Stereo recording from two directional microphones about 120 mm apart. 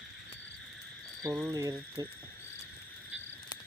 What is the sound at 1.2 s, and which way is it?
Speech, 25° right (ahead or behind).